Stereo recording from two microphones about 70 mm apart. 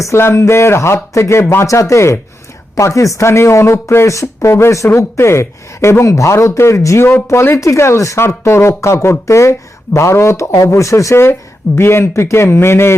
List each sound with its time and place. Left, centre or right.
0.0 s speech: left